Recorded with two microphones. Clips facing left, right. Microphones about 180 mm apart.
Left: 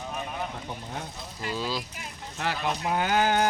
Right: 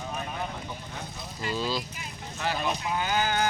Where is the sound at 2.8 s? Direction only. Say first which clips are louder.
Left 7 dB; 55° left (ahead or behind).